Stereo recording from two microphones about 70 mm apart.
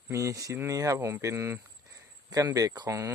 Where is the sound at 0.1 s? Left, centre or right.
Right.